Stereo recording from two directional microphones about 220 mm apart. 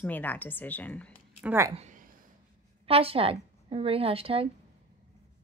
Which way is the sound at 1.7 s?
35° right (ahead or behind).